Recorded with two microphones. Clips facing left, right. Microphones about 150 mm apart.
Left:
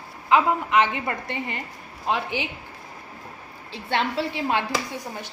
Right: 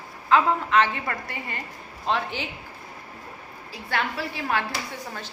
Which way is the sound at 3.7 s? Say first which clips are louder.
Left 3 dB; 25° left (ahead or behind).